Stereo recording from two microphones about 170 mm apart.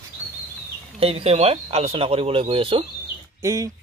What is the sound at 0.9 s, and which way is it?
Speech, 35° right (ahead or behind).